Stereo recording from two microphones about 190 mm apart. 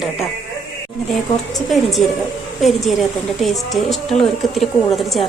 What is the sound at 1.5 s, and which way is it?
Speech, centre (ahead or behind).